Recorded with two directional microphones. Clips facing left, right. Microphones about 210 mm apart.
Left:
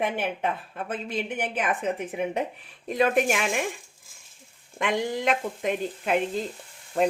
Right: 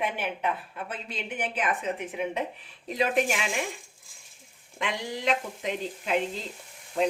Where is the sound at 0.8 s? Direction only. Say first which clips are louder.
Left 7 dB; 50° left (ahead or behind).